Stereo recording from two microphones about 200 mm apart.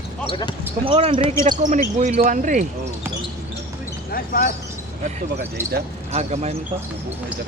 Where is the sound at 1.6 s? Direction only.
40° right (ahead or behind).